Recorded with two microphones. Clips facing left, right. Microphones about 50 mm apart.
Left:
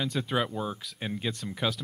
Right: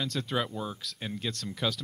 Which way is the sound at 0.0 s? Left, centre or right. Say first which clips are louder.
Left 2 dB; centre.